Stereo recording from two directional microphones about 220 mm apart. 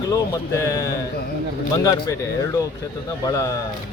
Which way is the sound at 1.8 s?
15° left (ahead or behind).